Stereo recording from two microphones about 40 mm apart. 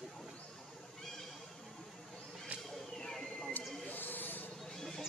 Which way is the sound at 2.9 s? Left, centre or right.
Centre.